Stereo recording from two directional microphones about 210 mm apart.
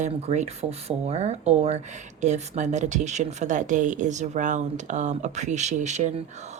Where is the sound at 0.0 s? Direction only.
30° right (ahead or behind).